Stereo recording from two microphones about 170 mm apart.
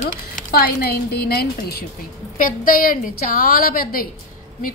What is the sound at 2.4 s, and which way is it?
A woman's voice, 55° left (ahead or behind).